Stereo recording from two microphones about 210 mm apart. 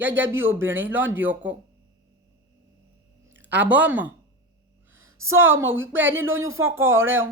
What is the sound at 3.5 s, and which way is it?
Speech, 10° right (ahead or behind).